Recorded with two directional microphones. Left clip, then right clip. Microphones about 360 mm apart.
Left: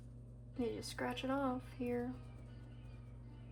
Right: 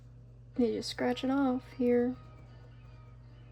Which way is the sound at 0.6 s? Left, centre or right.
Right.